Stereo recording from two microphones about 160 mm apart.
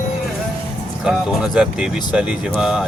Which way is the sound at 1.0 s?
Centre (ahead or behind).